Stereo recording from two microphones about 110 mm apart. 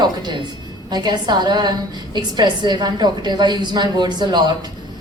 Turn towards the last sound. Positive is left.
turn(degrees=-40)  # may be behind; listen again after turning